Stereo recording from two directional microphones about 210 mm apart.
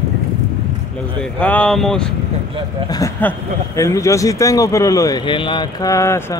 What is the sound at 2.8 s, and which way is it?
Speech, 15° left (ahead or behind).